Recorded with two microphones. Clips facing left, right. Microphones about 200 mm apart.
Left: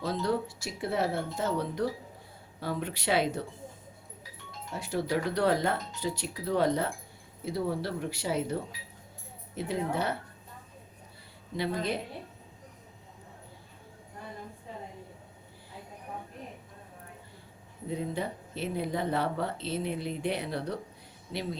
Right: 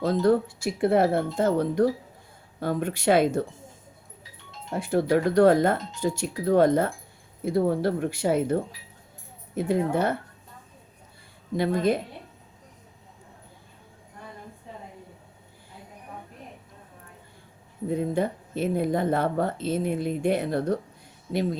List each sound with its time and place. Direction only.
0.0 s speech: 50° right (ahead or behind)
4.7 s speech: 55° right (ahead or behind)
11.5 s speech: 50° right (ahead or behind)
17.8 s speech: 50° right (ahead or behind)